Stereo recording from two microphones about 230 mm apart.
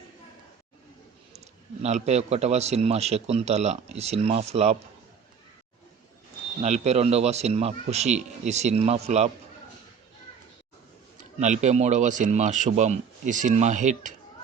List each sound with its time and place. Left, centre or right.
1.8 s a man's voice: right
6.6 s a man's voice: right
11.2 s speech: right